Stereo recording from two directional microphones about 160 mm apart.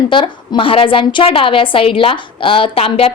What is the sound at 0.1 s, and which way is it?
A woman's voice, 30° left (ahead or behind).